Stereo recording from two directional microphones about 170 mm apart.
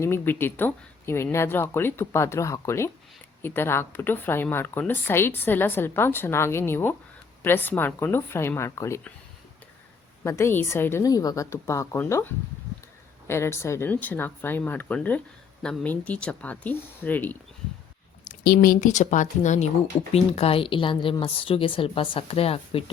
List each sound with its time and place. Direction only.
0.0 s speech: 15° left (ahead or behind)
10.2 s speech: 15° left (ahead or behind)
18.3 s a woman's voice: 65° left (ahead or behind); by 22.8 s 35° left (ahead or behind)